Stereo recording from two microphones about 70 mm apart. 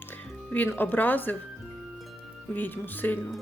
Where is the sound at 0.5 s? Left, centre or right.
Left.